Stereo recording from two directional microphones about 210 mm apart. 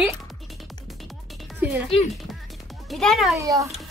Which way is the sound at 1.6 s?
5° right (ahead or behind).